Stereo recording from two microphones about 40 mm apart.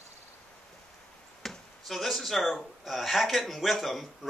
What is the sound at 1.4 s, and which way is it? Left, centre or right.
Speech, centre.